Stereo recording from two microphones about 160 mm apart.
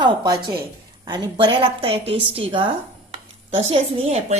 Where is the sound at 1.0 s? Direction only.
25° right (ahead or behind).